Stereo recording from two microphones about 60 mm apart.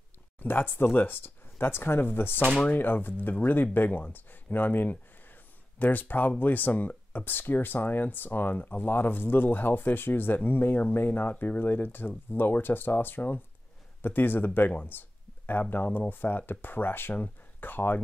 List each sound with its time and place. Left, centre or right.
0.4 s speech: left
2.4 s speech: centre
2.8 s speech: left
14.8 s a sound: left
15.7 s speech: left